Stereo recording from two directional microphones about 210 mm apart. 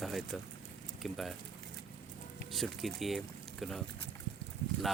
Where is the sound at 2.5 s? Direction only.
Centre (ahead or behind).